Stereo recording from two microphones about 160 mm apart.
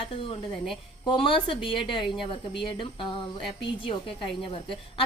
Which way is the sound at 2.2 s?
30° left (ahead or behind).